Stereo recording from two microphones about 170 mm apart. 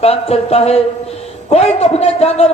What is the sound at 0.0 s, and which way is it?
A man's voice, 35° left (ahead or behind).